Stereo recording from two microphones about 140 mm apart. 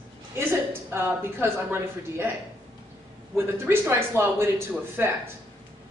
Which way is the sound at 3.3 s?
15° right (ahead or behind).